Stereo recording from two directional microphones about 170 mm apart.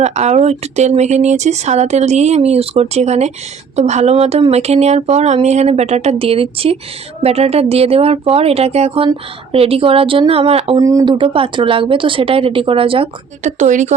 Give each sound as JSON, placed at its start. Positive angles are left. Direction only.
{"t": 0.0, "sound": "speech", "side_deg": -40}
{"t": 10.8, "sound": "speech", "side_deg": -20}